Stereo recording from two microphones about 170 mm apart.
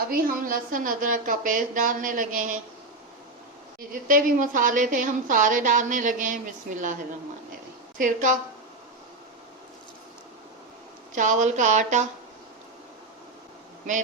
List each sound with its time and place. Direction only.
0.1 s a woman's voice: 60° right (ahead or behind)
3.8 s a woman's voice: 55° right (ahead or behind)
7.9 s a woman's voice: 50° right (ahead or behind)
11.1 s a woman's voice: 45° right (ahead or behind)